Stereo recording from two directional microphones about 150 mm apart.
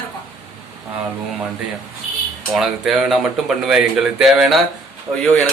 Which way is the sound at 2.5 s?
Centre (ahead or behind).